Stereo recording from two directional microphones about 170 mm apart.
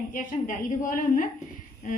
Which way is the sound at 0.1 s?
50° left (ahead or behind).